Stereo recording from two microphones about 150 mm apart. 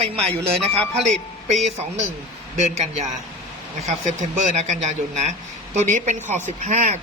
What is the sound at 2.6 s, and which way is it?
Speech, 50° right (ahead or behind).